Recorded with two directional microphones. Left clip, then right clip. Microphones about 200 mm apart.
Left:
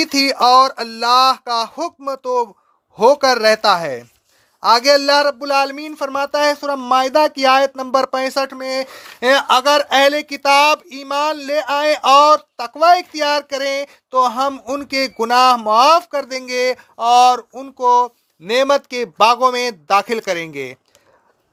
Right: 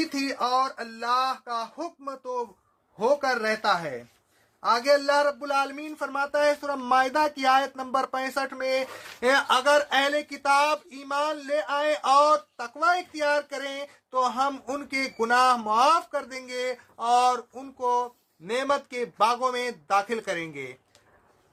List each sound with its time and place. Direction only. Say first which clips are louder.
0.0 s speech: left 14 dB; 55° left (ahead or behind)